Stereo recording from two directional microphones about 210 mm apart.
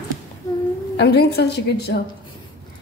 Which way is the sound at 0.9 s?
50° left (ahead or behind).